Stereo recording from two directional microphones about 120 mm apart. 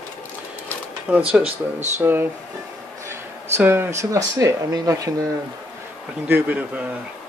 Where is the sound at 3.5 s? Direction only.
15° right (ahead or behind).